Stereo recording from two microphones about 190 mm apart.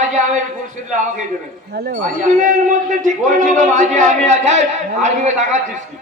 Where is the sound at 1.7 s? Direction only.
55° right (ahead or behind); by 5.8 s 40° right (ahead or behind).